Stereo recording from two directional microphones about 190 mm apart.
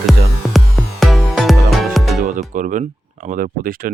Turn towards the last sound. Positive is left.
turn(degrees=-50)  # may be behind; listen again after turning